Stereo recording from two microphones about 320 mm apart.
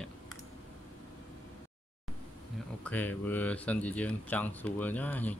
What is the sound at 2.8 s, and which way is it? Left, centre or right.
Speech, centre.